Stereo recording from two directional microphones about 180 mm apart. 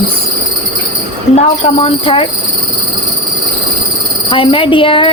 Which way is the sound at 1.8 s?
30° left (ahead or behind).